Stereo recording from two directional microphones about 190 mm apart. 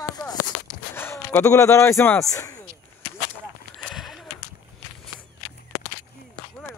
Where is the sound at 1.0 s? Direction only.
10° left (ahead or behind).